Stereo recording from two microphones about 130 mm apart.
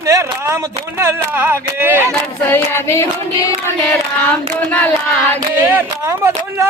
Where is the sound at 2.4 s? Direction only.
15° left (ahead or behind).